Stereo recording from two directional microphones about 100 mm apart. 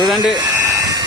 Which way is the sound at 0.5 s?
30° right (ahead or behind).